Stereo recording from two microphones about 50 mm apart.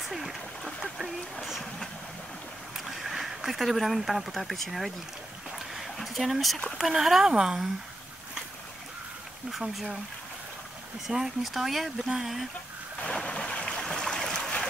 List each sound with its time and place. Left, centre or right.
0.1 s a sound: centre
2.8 s speech: centre
5.8 s a sound: centre
6.8 s speech: centre
9.5 s speech: centre
11.1 s speech: centre
13.1 s stream: centre